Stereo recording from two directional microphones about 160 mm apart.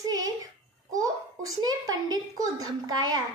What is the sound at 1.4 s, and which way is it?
A child's voice, 25° right (ahead or behind).